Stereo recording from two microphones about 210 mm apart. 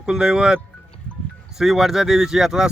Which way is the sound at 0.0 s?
5° right (ahead or behind).